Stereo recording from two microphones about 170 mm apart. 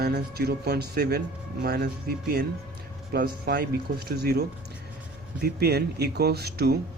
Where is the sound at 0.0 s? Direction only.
70° right (ahead or behind).